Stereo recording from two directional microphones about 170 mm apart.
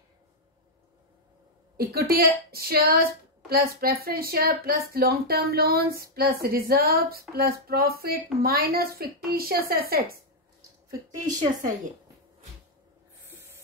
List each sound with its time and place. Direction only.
1.8 s a woman's voice: 65° right (ahead or behind)